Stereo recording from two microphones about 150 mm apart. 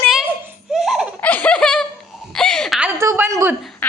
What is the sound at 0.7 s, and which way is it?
Baby laughter, centre (ahead or behind).